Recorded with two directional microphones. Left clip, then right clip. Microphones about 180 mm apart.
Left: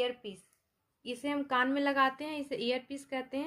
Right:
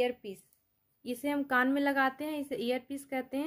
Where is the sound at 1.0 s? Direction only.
50° right (ahead or behind).